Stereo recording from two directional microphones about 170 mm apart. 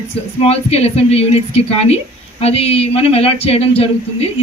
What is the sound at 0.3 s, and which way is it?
Speech, 35° left (ahead or behind).